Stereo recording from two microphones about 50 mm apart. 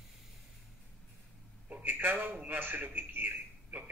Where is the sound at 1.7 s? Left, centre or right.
Right.